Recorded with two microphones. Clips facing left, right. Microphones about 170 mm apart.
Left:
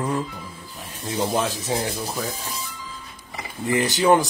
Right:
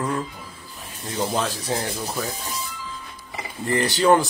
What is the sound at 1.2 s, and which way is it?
Speech, 10° left (ahead or behind).